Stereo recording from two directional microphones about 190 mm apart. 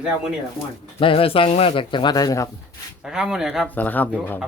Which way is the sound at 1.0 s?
30° left (ahead or behind).